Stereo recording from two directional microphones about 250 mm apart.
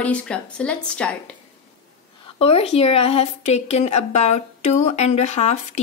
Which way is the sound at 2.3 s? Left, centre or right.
Left.